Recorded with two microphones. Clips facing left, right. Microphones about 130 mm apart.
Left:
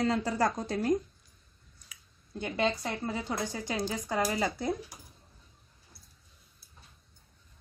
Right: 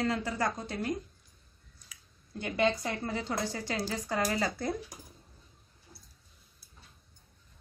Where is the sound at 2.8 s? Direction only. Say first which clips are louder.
Even; 15° left (ahead or behind).